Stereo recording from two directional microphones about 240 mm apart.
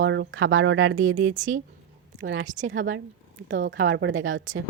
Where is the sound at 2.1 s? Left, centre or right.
Right.